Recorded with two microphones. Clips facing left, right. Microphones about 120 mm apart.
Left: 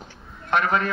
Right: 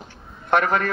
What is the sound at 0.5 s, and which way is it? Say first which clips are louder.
Speech: right 2 dB; 65° right (ahead or behind).